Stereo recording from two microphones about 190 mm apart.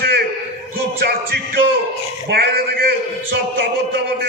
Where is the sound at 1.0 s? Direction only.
55° right (ahead or behind).